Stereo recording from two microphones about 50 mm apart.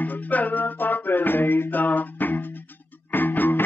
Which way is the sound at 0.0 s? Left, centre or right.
Left.